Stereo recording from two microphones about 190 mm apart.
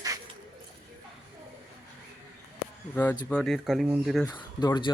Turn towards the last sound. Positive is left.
turn(degrees=25)  # may be behind; listen again after turning